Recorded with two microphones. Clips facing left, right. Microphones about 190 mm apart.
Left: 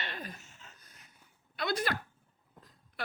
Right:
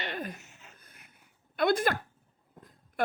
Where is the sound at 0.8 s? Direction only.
55° right (ahead or behind).